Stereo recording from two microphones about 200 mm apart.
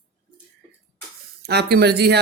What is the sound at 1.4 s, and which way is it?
Speech, 55° right (ahead or behind).